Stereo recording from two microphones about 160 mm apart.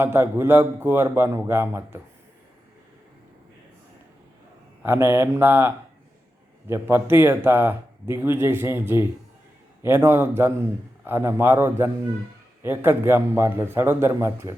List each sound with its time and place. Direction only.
0.0 s speech: 15° right (ahead or behind)
4.8 s speech: 15° right (ahead or behind)